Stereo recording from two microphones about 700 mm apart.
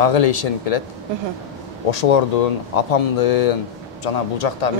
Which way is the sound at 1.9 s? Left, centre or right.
Left.